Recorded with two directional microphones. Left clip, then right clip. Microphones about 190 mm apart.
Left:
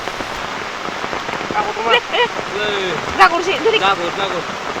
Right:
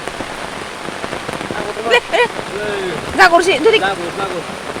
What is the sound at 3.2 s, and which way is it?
Speech, 70° right (ahead or behind).